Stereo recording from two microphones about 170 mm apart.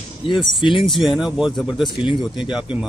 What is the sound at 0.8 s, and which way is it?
Speech, centre (ahead or behind).